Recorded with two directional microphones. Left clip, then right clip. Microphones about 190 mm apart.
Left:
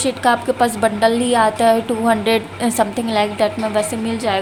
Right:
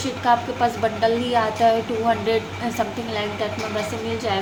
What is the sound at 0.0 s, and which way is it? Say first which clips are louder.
A woman's voice: left 4 dB; 45° left (ahead or behind).